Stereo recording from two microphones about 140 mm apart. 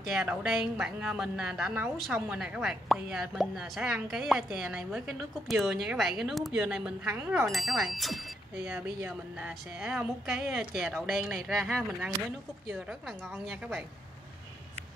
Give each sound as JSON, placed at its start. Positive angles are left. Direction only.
{"t": 0.1, "sound": "a woman's voice", "side_deg": -10}
{"t": 7.5, "sound": "a woman's voice", "side_deg": 0}
{"t": 8.6, "sound": "a woman's voice", "side_deg": -10}
{"t": 13.5, "sound": "a woman's voice", "side_deg": 0}